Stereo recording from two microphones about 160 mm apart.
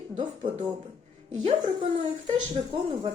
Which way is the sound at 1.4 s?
30° right (ahead or behind).